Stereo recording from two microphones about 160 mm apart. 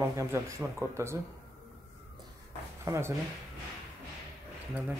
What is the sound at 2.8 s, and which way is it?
Speech, 15° right (ahead or behind).